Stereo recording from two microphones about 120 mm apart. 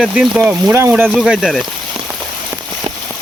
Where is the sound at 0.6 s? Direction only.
20° right (ahead or behind).